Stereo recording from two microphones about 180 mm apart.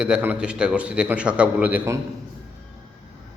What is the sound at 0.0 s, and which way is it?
A man's voice, 5° right (ahead or behind).